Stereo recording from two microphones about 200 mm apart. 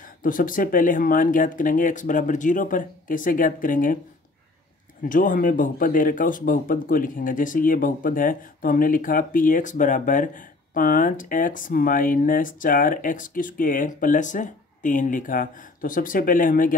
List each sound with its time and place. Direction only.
0.2 s speech: 45° left (ahead or behind)
5.0 s speech: 40° left (ahead or behind)